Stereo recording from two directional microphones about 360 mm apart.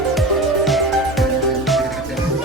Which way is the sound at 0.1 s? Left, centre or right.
Centre.